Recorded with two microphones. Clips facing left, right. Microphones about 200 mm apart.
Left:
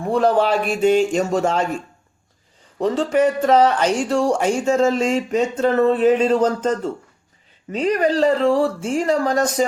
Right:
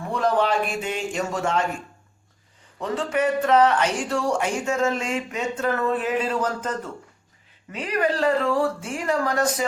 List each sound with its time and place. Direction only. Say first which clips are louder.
0.1 s speech: left 5 dB; 30° left (ahead or behind)
2.7 s speech: left 7 dB; 30° left (ahead or behind)
8.9 s speech: left 6 dB; 30° left (ahead or behind)